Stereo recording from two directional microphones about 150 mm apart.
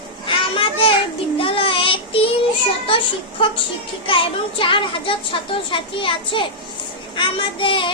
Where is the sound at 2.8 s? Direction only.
35° left (ahead or behind).